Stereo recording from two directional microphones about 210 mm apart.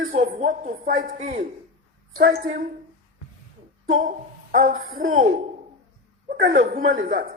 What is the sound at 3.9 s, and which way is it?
A woman's voice, 40° right (ahead or behind).